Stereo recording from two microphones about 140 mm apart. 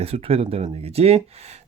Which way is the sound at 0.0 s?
45° right (ahead or behind).